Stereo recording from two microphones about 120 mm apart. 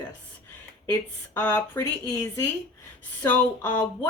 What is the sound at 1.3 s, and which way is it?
Speech, 15° left (ahead or behind).